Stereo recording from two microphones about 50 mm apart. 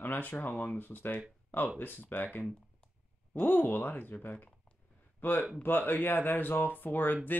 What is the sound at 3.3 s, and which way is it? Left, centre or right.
Speech, left.